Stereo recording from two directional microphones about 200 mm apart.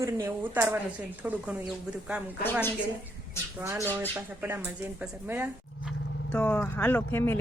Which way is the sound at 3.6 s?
10° right (ahead or behind).